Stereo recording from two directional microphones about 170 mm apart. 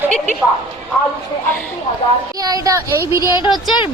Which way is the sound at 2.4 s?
20° right (ahead or behind).